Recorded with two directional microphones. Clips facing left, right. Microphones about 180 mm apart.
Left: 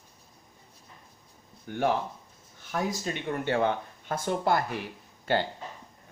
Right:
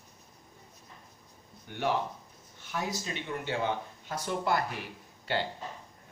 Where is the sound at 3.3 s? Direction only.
60° left (ahead or behind).